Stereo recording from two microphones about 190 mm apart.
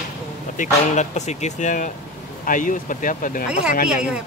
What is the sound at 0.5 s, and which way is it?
Speech, 40° left (ahead or behind).